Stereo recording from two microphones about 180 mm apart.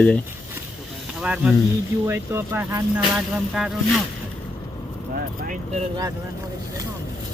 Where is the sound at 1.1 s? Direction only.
5° right (ahead or behind).